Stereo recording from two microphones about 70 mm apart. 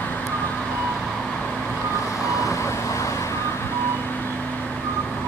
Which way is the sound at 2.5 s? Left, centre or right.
Left.